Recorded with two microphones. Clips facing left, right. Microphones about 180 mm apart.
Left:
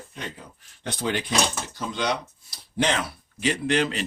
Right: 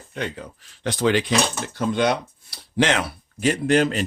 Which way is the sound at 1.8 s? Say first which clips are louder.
Right 8 dB; 55° right (ahead or behind).